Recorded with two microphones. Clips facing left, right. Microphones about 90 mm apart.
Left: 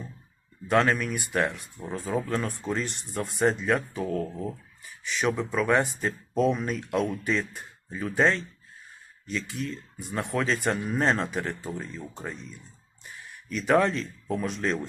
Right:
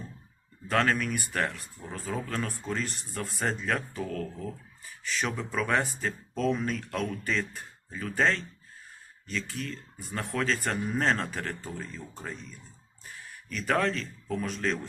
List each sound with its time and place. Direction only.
0.7 s speech: 10° left (ahead or behind)
4.1 s speech: 25° left (ahead or behind)
5.0 s speech: 5° left (ahead or behind)
13.5 s speech: 5° left (ahead or behind)